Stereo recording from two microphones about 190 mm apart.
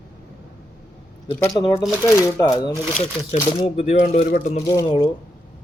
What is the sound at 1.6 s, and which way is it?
Speech, 20° left (ahead or behind).